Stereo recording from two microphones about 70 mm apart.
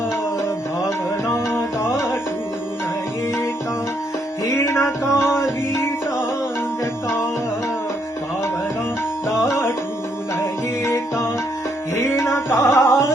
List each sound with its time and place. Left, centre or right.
0.4 s music: left
4.4 s music: left
9.4 s music: left
11.9 s tabla: left